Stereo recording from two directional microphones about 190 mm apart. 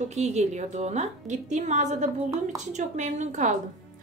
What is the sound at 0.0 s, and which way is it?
A woman's voice, 35° right (ahead or behind).